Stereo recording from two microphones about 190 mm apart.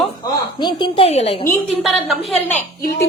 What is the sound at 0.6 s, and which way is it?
Speech, 25° left (ahead or behind).